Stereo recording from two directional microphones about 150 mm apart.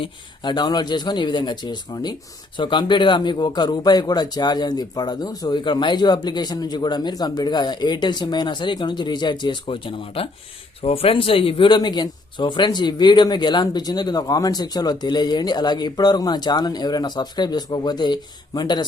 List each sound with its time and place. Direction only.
0.0 s speech: 30° left (ahead or behind)